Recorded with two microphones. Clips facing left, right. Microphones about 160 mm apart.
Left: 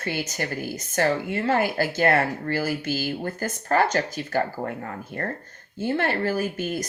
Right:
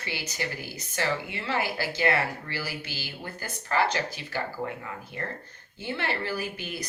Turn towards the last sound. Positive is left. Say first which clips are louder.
# left 8 dB
turn(degrees=45)  # may be behind; listen again after turning